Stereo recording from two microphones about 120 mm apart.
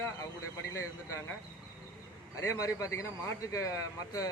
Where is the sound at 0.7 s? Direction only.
25° left (ahead or behind).